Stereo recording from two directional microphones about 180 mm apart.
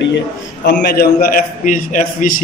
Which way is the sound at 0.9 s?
60° left (ahead or behind).